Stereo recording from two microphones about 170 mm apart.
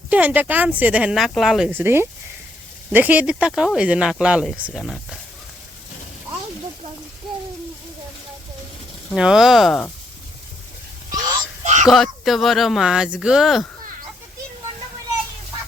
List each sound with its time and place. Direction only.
0.1 s speech: 10° right (ahead or behind)
9.1 s speech: 5° right (ahead or behind)
11.6 s a sound: 45° right (ahead or behind)
11.9 s speech: centre (ahead or behind)